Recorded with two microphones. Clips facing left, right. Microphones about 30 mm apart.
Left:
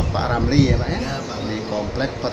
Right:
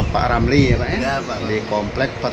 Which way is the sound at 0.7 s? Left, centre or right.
Right.